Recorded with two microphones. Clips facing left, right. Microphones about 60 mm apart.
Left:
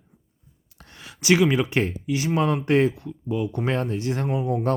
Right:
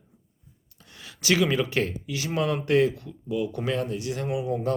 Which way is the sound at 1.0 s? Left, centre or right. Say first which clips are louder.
Left 4 dB; left.